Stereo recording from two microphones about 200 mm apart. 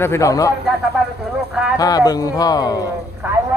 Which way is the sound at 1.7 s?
20° left (ahead or behind).